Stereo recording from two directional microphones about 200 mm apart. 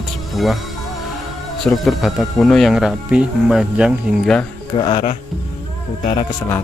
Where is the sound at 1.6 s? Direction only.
Centre (ahead or behind).